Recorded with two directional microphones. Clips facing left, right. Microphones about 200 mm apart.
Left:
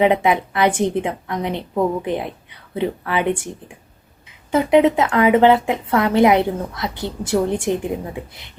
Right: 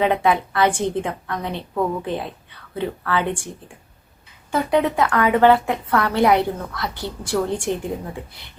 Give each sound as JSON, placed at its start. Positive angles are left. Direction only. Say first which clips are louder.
{"t": 0.0, "sound": "a woman's voice", "louder": "left 3 dB", "side_deg": 20}
{"t": 4.5, "sound": "a woman's voice", "louder": "left 5 dB", "side_deg": 20}